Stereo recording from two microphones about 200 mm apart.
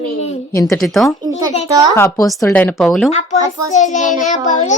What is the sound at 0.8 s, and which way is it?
Speech, centre (ahead or behind).